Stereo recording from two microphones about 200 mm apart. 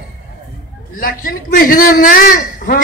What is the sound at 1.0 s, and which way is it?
A man's voice, 45° left (ahead or behind).